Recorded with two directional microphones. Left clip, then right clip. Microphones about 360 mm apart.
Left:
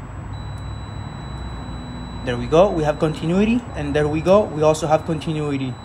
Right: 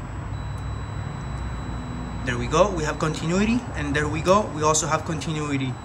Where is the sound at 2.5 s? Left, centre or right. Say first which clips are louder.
Left 6 dB; centre.